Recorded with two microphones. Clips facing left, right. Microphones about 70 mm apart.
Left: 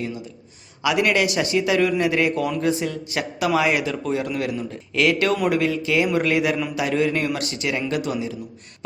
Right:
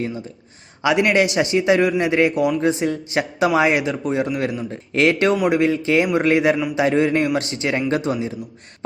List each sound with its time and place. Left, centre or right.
0.8 s a man's voice: right